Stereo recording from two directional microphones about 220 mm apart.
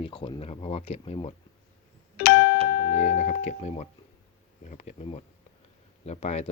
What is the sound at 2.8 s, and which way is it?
Speech, 30° left (ahead or behind).